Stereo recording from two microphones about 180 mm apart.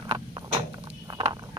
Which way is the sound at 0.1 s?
25° right (ahead or behind).